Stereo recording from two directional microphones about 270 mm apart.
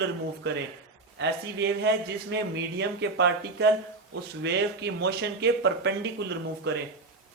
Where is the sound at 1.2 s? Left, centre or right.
Right.